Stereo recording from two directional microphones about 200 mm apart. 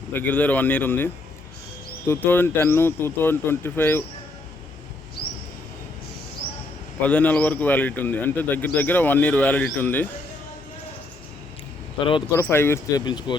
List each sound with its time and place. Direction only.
0.1 s speech: 10° left (ahead or behind)
7.0 s speech: 5° left (ahead or behind)
11.9 s speech: 25° left (ahead or behind)
12.3 s speech: 10° left (ahead or behind)